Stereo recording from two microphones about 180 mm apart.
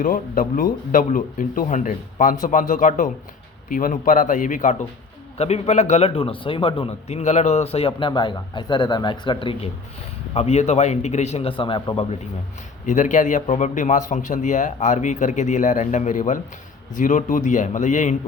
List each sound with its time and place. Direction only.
0.0 s a man's voice: 50° left (ahead or behind); by 12.0 s 30° left (ahead or behind)
12.8 s a man's voice: 45° left (ahead or behind)